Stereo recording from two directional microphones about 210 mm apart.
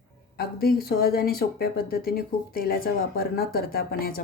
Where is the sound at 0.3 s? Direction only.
45° left (ahead or behind).